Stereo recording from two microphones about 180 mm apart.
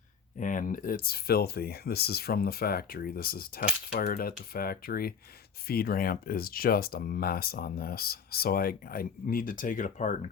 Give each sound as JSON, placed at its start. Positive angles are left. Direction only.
{"t": 0.3, "sound": "speech", "side_deg": 45}